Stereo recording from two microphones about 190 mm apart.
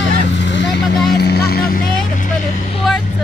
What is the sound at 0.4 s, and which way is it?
Vehicle, 70° left (ahead or behind).